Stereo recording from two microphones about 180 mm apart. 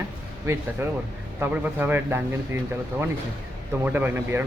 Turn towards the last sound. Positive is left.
turn(degrees=-10)  # may be behind; listen again after turning